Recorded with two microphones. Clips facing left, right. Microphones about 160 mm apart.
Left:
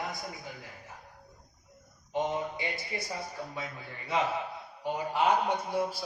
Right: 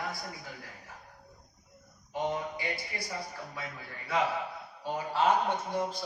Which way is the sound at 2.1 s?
20° left (ahead or behind).